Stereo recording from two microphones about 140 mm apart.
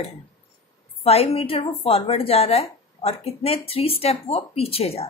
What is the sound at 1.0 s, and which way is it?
A woman's voice, 45° left (ahead or behind).